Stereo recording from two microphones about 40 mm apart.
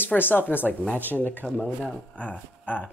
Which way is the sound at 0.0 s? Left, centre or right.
Left.